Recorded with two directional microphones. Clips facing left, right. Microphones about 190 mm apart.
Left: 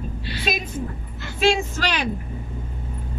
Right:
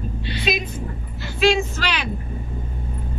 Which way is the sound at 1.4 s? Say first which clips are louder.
Right 2 dB; 45° left (ahead or behind).